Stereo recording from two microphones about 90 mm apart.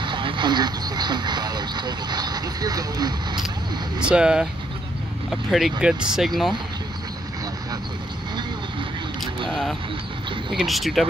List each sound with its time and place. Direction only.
0.0 s a sound: 65° right (ahead or behind); by 3.4 s 50° right (ahead or behind)
4.0 s speech: 10° right (ahead or behind)
9.5 s speech: centre (ahead or behind)